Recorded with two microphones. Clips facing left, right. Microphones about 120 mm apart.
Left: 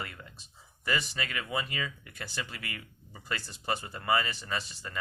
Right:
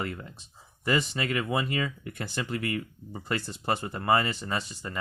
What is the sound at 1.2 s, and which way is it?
Speech, 45° right (ahead or behind).